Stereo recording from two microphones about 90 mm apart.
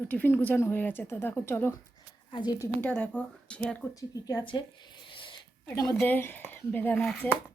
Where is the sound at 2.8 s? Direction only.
10° left (ahead or behind).